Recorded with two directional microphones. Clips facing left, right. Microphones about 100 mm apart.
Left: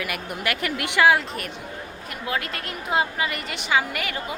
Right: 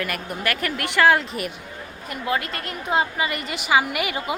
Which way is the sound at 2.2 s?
Centre (ahead or behind).